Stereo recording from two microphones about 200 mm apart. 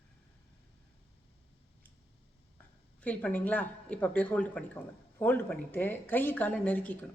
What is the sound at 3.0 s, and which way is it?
A woman's voice, 5° left (ahead or behind).